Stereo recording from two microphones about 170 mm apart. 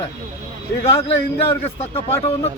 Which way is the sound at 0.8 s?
35° left (ahead or behind).